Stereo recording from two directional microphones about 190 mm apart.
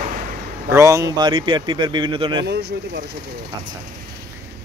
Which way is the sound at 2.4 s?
60° right (ahead or behind).